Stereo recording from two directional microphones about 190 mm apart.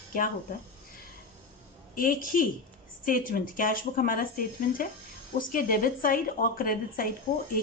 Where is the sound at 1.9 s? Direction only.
45° left (ahead or behind).